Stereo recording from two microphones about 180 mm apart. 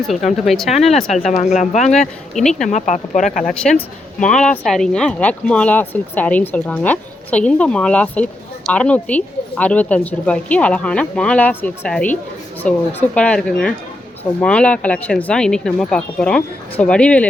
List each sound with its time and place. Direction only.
0.4 s speech: centre (ahead or behind)
1.1 s speech: 40° left (ahead or behind)
1.9 s speech: 5° left (ahead or behind)
2.6 s speech: 45° left (ahead or behind)
3.4 s speech: 5° left (ahead or behind)